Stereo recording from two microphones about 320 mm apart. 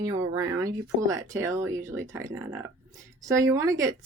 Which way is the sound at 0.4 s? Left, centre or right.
Centre.